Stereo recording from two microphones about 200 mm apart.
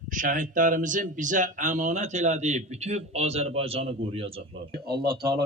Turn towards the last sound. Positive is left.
turn(degrees=-50)  # may be behind; listen again after turning